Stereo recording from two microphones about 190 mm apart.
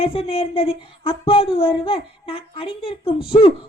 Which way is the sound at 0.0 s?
30° left (ahead or behind).